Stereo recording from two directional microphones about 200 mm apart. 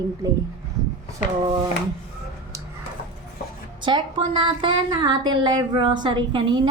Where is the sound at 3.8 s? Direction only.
25° right (ahead or behind).